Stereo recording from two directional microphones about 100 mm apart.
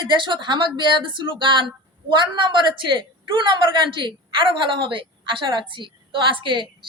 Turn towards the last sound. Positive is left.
turn(degrees=-55)  # may be behind; listen again after turning